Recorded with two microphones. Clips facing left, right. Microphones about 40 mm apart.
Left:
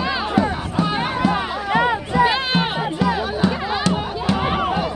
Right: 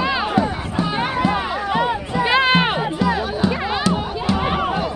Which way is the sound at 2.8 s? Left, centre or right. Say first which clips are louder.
Right 1 dB; centre.